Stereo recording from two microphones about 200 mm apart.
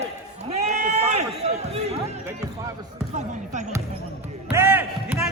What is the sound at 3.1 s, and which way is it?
Basketball bounce, 35° right (ahead or behind).